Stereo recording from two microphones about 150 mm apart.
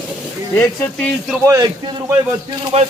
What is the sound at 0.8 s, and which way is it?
Speech, centre (ahead or behind).